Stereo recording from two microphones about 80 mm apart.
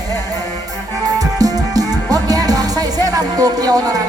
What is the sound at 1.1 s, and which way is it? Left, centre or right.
Music, right.